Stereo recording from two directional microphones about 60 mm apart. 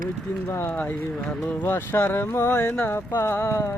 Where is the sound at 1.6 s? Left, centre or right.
Left.